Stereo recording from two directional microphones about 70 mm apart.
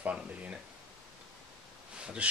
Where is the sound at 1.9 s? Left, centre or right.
Centre.